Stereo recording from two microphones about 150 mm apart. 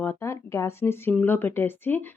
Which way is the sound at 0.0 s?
15° left (ahead or behind).